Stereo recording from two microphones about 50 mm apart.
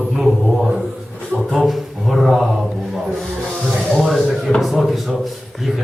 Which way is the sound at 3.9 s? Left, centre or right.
Centre.